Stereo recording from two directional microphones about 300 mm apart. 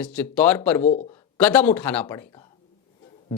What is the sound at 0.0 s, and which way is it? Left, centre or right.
Speech, centre.